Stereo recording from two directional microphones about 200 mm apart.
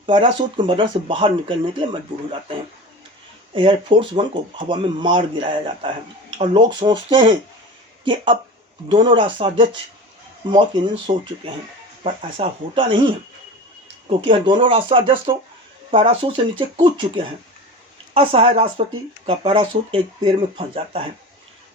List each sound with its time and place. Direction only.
0.0 s speech: 25° right (ahead or behind)
3.5 s speech: 25° right (ahead or behind)